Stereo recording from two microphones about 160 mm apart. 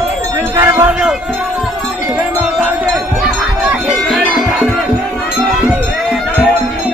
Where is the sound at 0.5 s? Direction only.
15° right (ahead or behind).